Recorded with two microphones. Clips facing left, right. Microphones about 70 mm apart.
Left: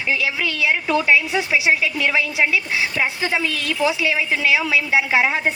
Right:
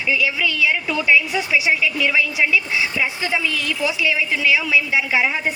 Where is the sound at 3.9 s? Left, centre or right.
Left.